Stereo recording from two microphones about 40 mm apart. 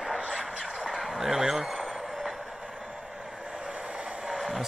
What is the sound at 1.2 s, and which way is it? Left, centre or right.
Speech, centre.